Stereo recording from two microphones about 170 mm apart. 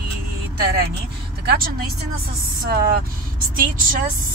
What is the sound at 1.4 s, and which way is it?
Speech, 75° right (ahead or behind).